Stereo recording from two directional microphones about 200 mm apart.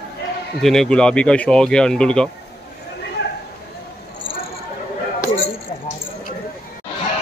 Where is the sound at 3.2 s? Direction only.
60° left (ahead or behind).